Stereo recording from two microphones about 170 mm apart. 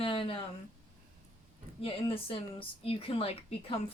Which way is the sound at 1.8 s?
35° left (ahead or behind).